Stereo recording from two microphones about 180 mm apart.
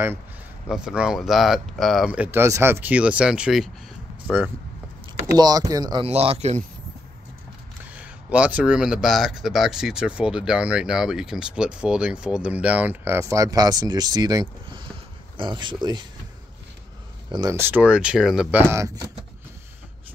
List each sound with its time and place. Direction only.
0.7 s speech: 5° right (ahead or behind)
5.4 s speech: 20° right (ahead or behind)
6.0 s speech: 35° right (ahead or behind)
7.9 s speech: 5° right (ahead or behind); by 16.0 s 25° right (ahead or behind)
17.3 s speech: 20° right (ahead or behind)